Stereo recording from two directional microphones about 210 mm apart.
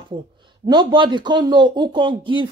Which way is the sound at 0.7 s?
20° right (ahead or behind).